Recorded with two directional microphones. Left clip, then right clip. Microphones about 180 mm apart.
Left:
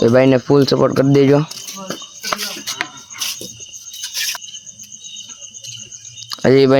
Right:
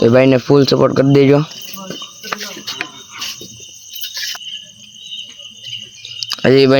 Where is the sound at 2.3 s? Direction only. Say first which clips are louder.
Left 2 dB; 35° left (ahead or behind).